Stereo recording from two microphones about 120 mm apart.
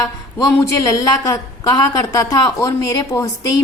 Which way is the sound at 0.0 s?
30° left (ahead or behind).